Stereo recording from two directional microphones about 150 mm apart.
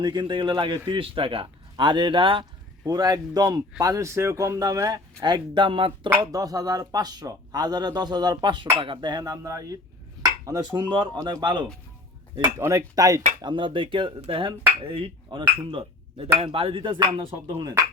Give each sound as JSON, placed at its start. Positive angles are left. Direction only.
{"t": 0.0, "sound": "a man's voice", "side_deg": -30}
{"t": 6.1, "sound": "a man's voice", "side_deg": -25}